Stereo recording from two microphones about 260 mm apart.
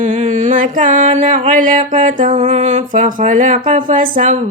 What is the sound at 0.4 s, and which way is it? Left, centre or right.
Music, right.